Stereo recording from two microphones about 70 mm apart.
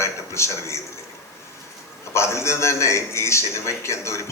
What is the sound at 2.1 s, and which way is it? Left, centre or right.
A man's voice, left.